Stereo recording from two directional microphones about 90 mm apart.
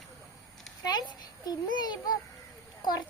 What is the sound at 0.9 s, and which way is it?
A child's voice, 50° left (ahead or behind).